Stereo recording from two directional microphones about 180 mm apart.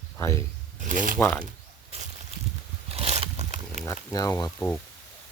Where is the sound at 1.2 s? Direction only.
10° left (ahead or behind).